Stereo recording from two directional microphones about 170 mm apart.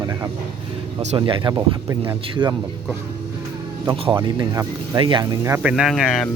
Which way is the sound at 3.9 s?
25° right (ahead or behind).